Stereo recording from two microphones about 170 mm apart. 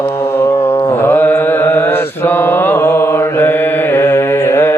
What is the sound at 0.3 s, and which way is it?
Mantra, 15° left (ahead or behind).